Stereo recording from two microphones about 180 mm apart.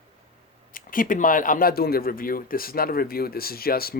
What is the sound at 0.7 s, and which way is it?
Speech, 50° left (ahead or behind).